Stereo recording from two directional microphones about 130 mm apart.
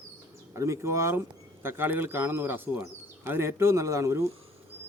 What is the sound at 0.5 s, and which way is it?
Speech, 20° right (ahead or behind).